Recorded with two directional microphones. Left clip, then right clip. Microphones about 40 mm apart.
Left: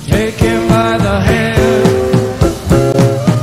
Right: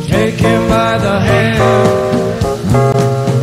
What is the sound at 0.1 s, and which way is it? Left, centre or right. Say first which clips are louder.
Music: right 1 dB; right.